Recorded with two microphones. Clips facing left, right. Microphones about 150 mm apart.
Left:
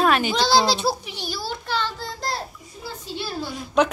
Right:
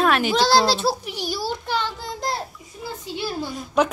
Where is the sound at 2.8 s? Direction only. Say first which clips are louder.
Right 3 dB; 15° right (ahead or behind).